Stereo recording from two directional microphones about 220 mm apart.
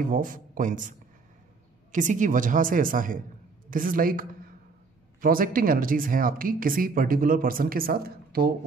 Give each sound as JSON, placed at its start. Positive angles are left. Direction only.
{"t": 0.1, "sound": "speech", "side_deg": -35}